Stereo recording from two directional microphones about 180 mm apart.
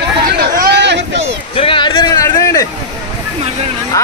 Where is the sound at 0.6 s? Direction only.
65° right (ahead or behind).